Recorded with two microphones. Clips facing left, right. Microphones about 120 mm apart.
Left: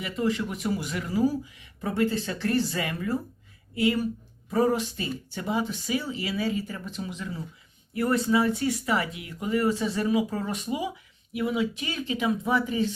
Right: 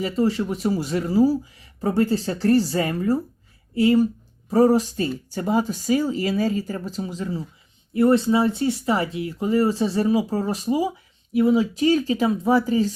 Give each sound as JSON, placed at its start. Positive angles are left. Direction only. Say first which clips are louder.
{"t": 0.0, "sound": "speech", "louder": "right 6 dB", "side_deg": -35}